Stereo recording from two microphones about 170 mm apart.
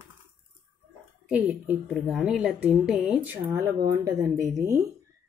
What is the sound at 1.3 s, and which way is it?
A woman's voice, 10° right (ahead or behind).